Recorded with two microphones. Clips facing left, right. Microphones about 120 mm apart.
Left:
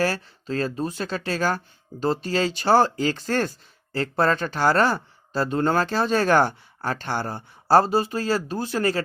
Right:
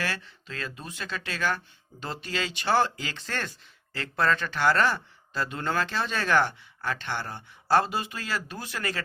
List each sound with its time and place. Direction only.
0.0 s speech: 40° left (ahead or behind)